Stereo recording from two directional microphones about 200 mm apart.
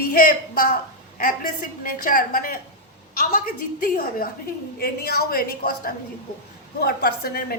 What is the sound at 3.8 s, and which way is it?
A woman's voice, 45° left (ahead or behind).